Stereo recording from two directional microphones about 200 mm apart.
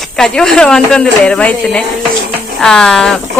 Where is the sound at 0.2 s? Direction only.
5° left (ahead or behind).